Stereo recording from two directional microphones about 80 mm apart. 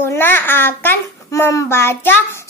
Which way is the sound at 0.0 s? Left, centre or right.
Left.